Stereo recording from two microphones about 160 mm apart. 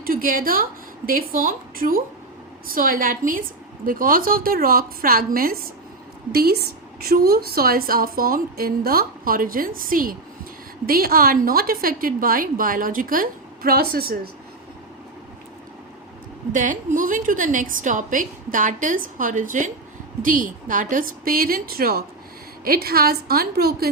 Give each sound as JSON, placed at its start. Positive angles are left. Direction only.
{"t": 0.0, "sound": "a woman's voice", "side_deg": -60}
{"t": 16.5, "sound": "a woman's voice", "side_deg": -55}